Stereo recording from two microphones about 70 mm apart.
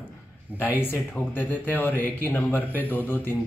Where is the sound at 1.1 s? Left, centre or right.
Left.